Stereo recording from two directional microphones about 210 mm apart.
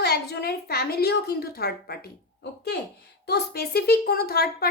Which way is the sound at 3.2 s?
50° left (ahead or behind).